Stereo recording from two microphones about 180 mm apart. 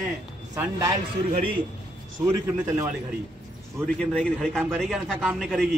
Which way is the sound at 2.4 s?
10° right (ahead or behind).